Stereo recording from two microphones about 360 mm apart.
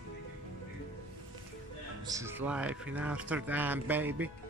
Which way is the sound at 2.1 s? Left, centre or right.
Centre.